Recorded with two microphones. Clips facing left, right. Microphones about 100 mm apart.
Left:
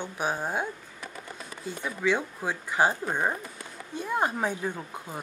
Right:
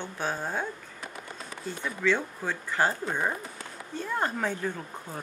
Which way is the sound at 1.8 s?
15° left (ahead or behind).